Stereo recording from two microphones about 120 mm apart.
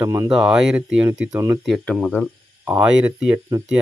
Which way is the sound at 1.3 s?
25° right (ahead or behind).